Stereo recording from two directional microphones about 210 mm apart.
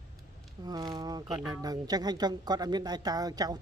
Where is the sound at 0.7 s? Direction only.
20° right (ahead or behind).